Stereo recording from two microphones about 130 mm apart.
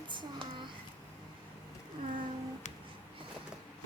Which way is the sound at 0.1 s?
35° right (ahead or behind).